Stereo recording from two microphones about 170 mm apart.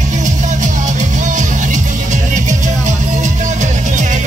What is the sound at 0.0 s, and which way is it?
Music, 45° right (ahead or behind).